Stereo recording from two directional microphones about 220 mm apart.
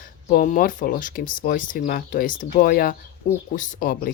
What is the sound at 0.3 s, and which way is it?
Speech, 35° left (ahead or behind).